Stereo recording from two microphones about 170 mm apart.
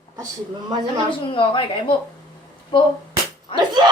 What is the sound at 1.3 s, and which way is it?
Speech, 30° left (ahead or behind).